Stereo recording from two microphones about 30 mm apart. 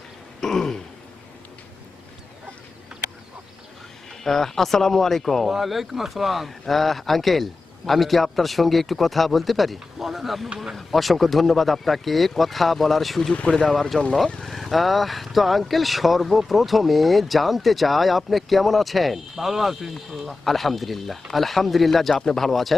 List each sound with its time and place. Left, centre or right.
0.4 s throat clearing: centre
4.2 s speech: centre
5.5 s speech: centre
13.9 s speech: left
14.4 s speech: centre
20.2 s speech: centre